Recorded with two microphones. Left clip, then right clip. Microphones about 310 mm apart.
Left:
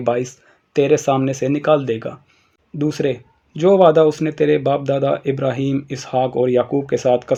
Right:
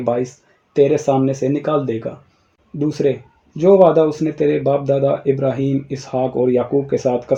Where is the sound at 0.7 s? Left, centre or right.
Left.